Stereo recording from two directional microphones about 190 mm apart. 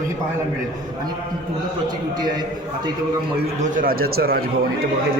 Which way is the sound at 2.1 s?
20° right (ahead or behind).